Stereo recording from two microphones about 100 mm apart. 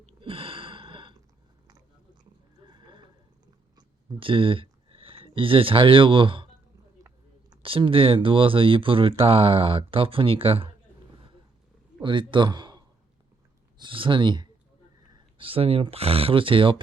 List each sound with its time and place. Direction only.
0.0 s sigh: 65° right (ahead or behind)
2.6 s a sound: 50° right (ahead or behind)
4.2 s speech: 60° right (ahead or behind)
7.0 s a sound: 35° right (ahead or behind)
7.6 s speech: 60° right (ahead or behind)
12.0 s speech: 55° right (ahead or behind)
13.7 s speech: 55° right (ahead or behind)
15.4 s speech: 70° right (ahead or behind)